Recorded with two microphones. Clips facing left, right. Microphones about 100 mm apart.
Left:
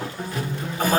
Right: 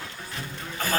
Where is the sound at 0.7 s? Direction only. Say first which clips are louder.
Left 6 dB; 20° left (ahead or behind).